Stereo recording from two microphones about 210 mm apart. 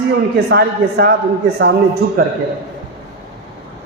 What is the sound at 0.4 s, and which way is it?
Speech, 50° right (ahead or behind).